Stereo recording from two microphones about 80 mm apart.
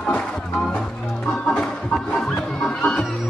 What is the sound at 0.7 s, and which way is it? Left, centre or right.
Music, centre.